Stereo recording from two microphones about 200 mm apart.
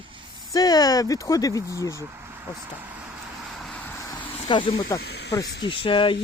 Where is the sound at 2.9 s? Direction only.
5° right (ahead or behind); by 4.3 s 10° left (ahead or behind).